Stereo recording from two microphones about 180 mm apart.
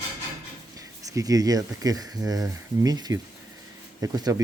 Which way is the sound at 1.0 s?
20° right (ahead or behind).